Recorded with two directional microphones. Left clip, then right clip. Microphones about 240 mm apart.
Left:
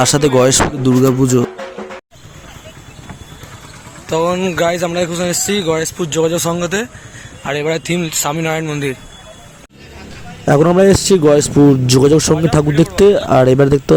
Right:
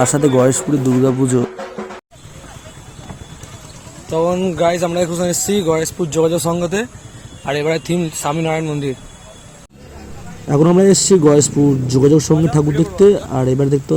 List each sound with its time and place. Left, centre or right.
0.0 s speech: left
1.2 s speech: centre
4.1 s a man's voice: centre
10.4 s a man's voice: left